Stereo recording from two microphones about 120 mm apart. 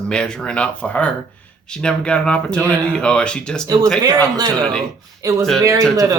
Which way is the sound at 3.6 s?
35° right (ahead or behind).